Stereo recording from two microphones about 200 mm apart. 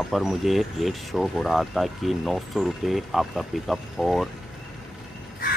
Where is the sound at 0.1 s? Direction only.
Centre (ahead or behind).